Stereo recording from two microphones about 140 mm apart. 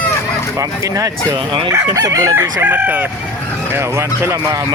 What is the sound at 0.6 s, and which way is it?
Speech, 25° right (ahead or behind).